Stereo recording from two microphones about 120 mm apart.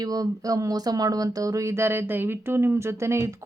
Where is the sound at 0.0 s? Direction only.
30° right (ahead or behind).